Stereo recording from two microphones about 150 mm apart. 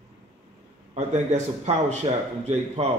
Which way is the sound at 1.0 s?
50° right (ahead or behind).